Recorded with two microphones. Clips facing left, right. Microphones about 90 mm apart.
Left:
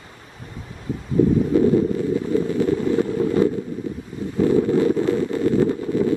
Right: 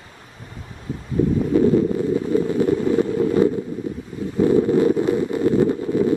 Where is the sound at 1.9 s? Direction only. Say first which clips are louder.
Right 1 dB; 20° right (ahead or behind).